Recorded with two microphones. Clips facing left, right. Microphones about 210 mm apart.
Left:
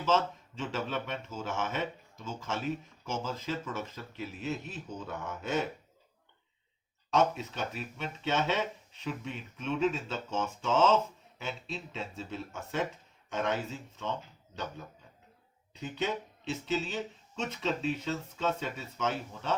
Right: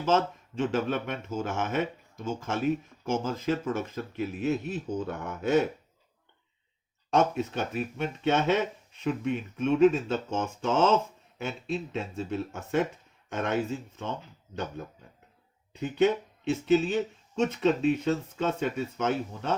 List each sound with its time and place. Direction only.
0.0 s speech: 55° right (ahead or behind)
7.1 s speech: 55° right (ahead or behind)
15.7 s speech: 50° right (ahead or behind)